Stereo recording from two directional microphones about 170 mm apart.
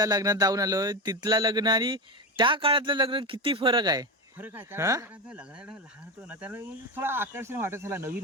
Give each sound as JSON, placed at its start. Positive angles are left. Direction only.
{"t": 0.0, "sound": "a sound", "side_deg": -20}
{"t": 4.4, "sound": "speech", "side_deg": -10}
{"t": 5.3, "sound": "speech", "side_deg": -5}